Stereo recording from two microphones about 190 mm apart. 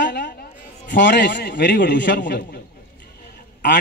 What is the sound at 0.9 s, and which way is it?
A man's voice, 65° left (ahead or behind).